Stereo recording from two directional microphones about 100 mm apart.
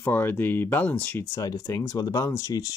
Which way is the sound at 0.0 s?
20° left (ahead or behind).